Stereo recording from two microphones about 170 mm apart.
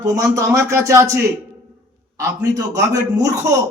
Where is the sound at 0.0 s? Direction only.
20° right (ahead or behind).